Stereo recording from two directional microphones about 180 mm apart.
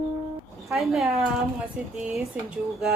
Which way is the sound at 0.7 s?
Centre (ahead or behind).